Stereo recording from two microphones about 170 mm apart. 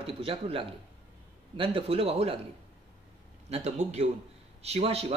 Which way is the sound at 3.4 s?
40° right (ahead or behind).